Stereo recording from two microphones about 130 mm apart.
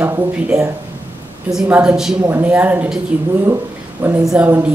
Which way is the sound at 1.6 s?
10° right (ahead or behind).